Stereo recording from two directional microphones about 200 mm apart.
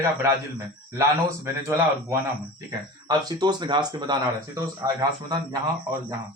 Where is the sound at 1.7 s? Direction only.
15° right (ahead or behind).